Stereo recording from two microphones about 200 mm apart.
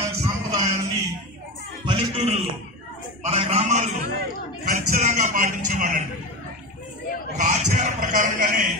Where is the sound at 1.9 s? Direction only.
30° right (ahead or behind).